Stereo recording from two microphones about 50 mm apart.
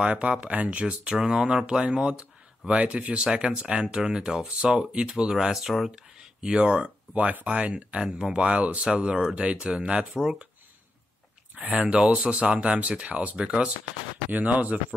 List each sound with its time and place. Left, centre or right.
0.0 s speech: right
2.8 s speech: right
11.5 s speech: right
14.3 s speech: right